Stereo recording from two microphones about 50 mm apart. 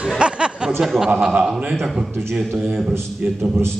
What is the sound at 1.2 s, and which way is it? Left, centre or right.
Speech, centre.